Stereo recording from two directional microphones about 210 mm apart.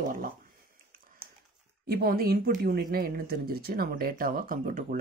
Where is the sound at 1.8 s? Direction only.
45° right (ahead or behind).